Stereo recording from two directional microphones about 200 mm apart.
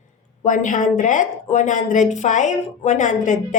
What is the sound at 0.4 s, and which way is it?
Speech, 40° left (ahead or behind).